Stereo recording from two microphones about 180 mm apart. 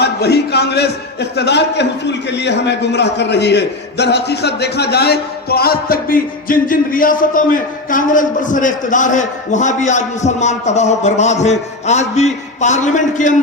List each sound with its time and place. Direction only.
0.0 s a man's voice: 65° left (ahead or behind); by 13.3 s 45° left (ahead or behind)